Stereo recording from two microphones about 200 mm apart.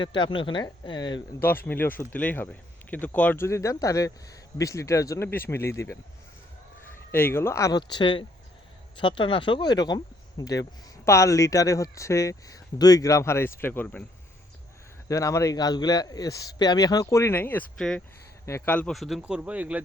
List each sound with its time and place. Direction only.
0.0 s speech: 25° left (ahead or behind)
1.4 s speech: 10° left (ahead or behind)
7.1 s speech: 10° left (ahead or behind)
15.0 s speech: 15° left (ahead or behind); by 19.8 s 5° right (ahead or behind)